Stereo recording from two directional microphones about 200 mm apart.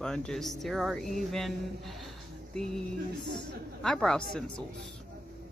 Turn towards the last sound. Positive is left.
turn(degrees=5)  # may be behind; listen again after turning